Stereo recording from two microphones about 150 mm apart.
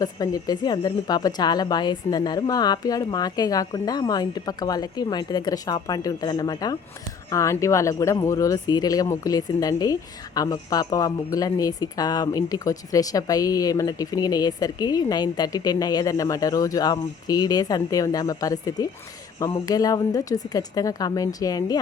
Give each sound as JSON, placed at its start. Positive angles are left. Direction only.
{"t": 0.0, "sound": "speech", "side_deg": 25}